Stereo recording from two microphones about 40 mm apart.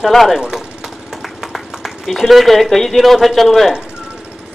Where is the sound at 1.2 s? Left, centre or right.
Centre.